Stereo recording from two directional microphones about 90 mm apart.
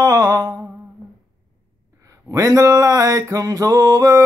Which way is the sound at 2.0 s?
40° right (ahead or behind).